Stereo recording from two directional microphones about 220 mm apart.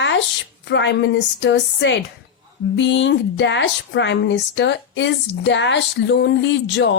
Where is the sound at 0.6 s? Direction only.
55° left (ahead or behind).